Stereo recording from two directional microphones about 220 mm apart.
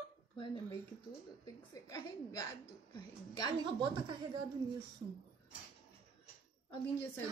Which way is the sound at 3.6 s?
20° right (ahead or behind).